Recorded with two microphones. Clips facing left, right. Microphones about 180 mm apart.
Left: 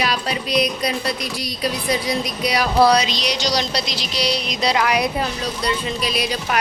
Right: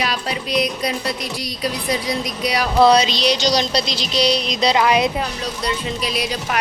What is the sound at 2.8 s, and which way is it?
Music, 25° right (ahead or behind).